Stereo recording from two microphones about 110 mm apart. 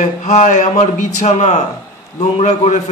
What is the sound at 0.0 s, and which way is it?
Speech, 90° left.